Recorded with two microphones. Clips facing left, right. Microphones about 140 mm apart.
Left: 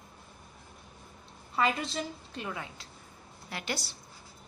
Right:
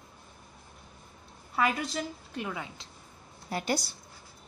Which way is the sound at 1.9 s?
10° right (ahead or behind).